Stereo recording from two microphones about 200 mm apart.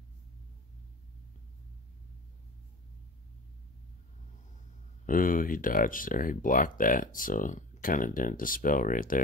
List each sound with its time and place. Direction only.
5.0 s speech: 45° left (ahead or behind)